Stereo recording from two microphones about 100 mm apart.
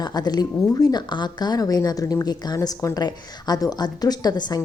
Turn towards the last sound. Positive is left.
turn(degrees=45)  # may be behind; listen again after turning